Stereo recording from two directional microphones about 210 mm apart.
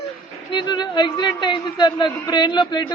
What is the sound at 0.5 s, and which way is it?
A man's voice, 20° left (ahead or behind).